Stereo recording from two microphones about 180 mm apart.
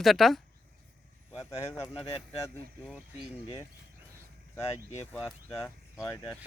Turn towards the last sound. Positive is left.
turn(degrees=0)  # may be behind; listen again after turning